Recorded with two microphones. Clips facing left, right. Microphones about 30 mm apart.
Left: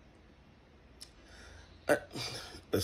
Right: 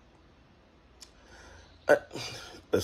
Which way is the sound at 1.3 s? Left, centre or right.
Left.